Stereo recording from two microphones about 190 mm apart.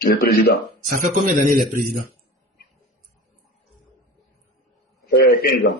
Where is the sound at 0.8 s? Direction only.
45° right (ahead or behind).